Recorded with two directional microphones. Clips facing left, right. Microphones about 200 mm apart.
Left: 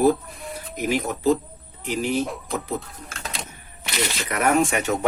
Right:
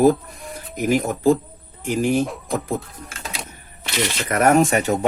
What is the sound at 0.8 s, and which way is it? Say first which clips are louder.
Speech: right 5 dB; 45° right (ahead or behind).